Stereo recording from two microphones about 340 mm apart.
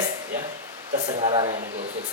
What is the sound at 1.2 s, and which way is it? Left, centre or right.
Speech, centre.